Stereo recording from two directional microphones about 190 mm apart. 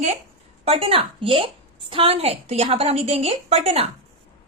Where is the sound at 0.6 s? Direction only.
30° right (ahead or behind).